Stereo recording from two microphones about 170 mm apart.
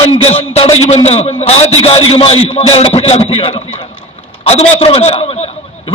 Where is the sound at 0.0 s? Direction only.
35° left (ahead or behind).